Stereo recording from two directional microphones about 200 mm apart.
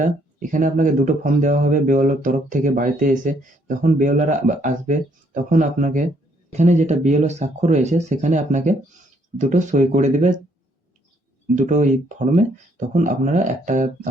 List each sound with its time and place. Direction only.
0.0 s speech: 40° right (ahead or behind)
11.5 s speech: 35° right (ahead or behind)